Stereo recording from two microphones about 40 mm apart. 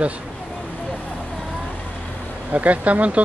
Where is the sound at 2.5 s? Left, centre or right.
Right.